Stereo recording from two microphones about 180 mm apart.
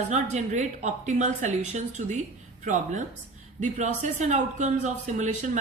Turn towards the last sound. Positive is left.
turn(degrees=-40)  # may be behind; listen again after turning